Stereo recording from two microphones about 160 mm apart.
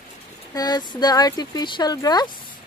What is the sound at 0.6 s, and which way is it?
Speech, 25° left (ahead or behind).